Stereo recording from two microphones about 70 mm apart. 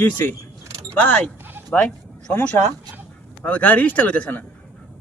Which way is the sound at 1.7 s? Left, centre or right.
Centre.